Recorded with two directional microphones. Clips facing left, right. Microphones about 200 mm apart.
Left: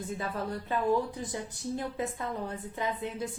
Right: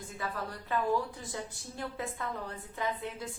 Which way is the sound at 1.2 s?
20° left (ahead or behind).